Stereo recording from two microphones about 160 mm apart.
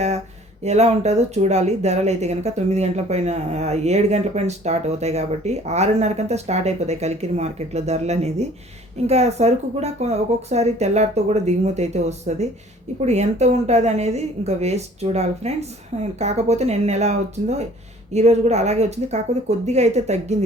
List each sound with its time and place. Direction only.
0.6 s speech: 45° right (ahead or behind)